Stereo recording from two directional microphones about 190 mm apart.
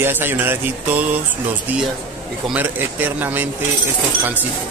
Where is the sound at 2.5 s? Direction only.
10° right (ahead or behind).